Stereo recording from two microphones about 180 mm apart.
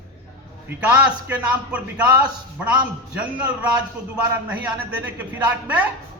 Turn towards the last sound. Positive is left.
turn(degrees=-10)  # may be behind; listen again after turning